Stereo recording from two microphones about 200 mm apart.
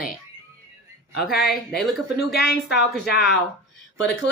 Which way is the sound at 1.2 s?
Centre (ahead or behind).